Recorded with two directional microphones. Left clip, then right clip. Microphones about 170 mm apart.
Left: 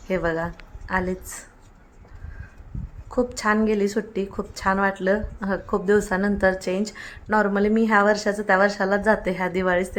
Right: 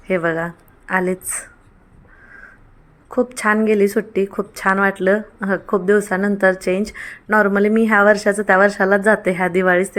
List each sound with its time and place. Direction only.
0.1 s a woman's voice: 15° right (ahead or behind)
3.1 s speech: 20° right (ahead or behind)